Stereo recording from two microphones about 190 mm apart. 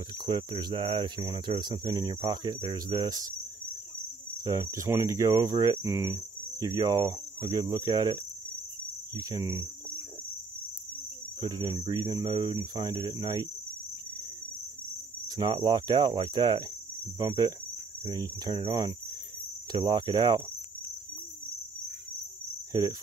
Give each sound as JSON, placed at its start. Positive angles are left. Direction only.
{"t": 0.2, "sound": "speech", "side_deg": -20}
{"t": 4.5, "sound": "speech", "side_deg": -15}
{"t": 11.4, "sound": "speech", "side_deg": -20}
{"t": 15.2, "sound": "speech", "side_deg": -20}
{"t": 22.7, "sound": "cricket", "side_deg": -20}